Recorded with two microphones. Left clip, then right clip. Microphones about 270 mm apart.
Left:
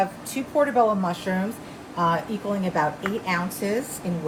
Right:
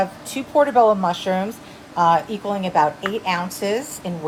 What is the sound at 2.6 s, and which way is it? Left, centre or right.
A woman's voice, centre.